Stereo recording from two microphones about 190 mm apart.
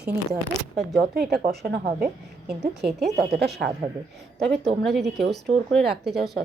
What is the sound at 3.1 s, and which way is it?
Speech, 60° right (ahead or behind).